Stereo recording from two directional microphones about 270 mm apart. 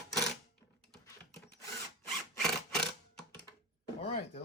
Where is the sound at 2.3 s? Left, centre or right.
Centre.